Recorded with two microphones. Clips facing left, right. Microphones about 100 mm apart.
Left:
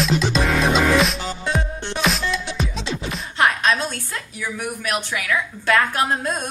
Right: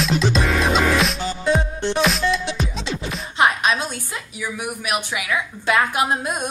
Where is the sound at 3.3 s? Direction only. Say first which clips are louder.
Even; 20° right (ahead or behind).